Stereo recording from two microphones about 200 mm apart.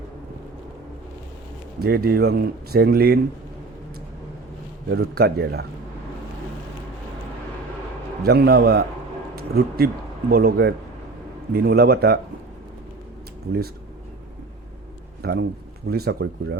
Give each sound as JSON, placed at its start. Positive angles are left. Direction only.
{"t": 1.8, "sound": "speech", "side_deg": -50}
{"t": 4.9, "sound": "speech", "side_deg": -55}
{"t": 8.2, "sound": "speech", "side_deg": -55}
{"t": 15.2, "sound": "speech", "side_deg": -55}